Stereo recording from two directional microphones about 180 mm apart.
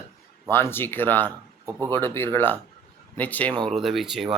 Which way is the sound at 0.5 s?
10° left (ahead or behind).